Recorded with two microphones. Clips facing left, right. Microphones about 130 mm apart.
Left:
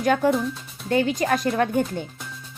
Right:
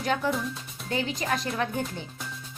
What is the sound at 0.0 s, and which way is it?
Speech, 50° left (ahead or behind).